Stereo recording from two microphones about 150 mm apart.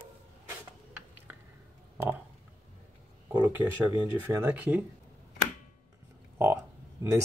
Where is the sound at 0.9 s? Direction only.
15° right (ahead or behind).